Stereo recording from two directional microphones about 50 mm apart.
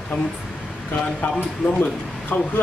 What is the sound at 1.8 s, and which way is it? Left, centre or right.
Speech, left.